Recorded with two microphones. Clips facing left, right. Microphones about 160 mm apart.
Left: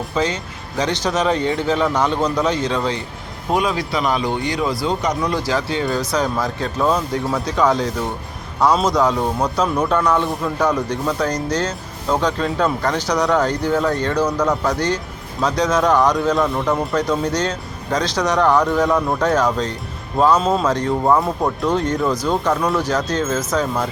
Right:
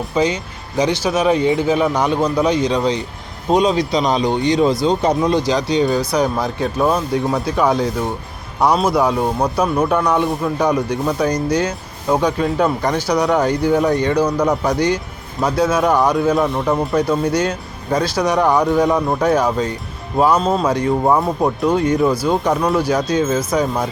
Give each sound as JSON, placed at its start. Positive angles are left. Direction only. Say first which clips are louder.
{"t": 0.1, "sound": "a man's voice", "louder": "right 4 dB", "side_deg": -15}